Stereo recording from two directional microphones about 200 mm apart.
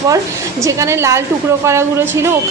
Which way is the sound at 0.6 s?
15° right (ahead or behind).